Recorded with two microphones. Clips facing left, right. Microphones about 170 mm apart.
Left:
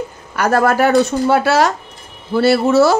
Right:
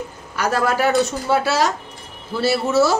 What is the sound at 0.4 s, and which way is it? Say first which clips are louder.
Speech: left 5 dB; 55° left (ahead or behind).